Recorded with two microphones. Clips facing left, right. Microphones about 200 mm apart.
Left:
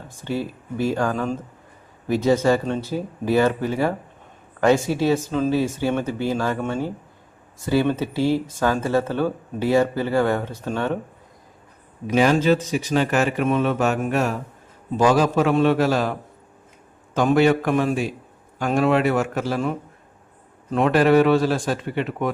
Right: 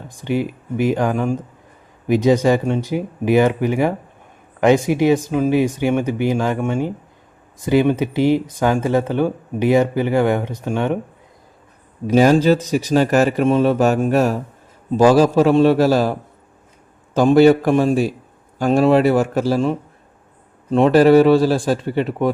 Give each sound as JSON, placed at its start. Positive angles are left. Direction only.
{"t": 0.1, "sound": "speech", "side_deg": -15}
{"t": 12.0, "sound": "a man's voice", "side_deg": -40}
{"t": 17.2, "sound": "a man's voice", "side_deg": -35}